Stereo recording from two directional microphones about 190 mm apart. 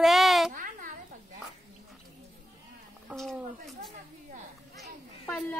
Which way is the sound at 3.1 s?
Centre (ahead or behind).